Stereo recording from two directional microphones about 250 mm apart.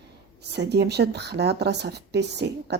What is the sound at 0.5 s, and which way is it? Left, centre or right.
A woman's voice, right.